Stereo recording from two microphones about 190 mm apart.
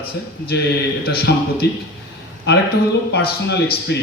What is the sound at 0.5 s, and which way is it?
Speech, 60° left (ahead or behind).